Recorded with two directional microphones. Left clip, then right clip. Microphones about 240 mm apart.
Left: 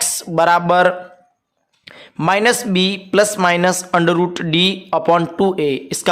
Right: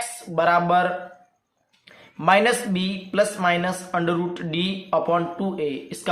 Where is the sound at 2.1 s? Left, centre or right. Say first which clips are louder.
Left 3 dB; left.